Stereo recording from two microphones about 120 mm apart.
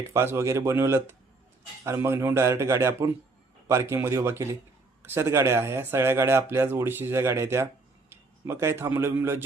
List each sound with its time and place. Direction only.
0.0 s speech: 20° right (ahead or behind)